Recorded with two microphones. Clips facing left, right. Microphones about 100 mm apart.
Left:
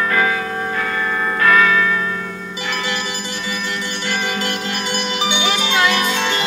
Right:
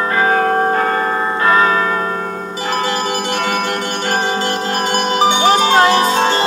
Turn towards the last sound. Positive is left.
turn(degrees=-35)  # may be behind; listen again after turning